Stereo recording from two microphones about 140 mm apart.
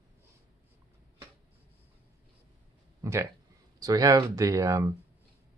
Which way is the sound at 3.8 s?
25° right (ahead or behind).